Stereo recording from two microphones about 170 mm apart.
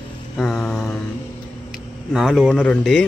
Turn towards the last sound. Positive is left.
turn(degrees=0)  # may be behind; listen again after turning